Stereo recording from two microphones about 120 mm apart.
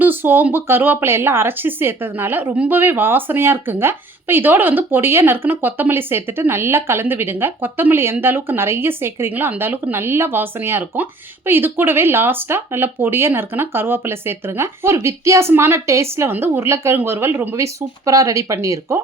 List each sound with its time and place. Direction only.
0.0 s speech: 15° right (ahead or behind)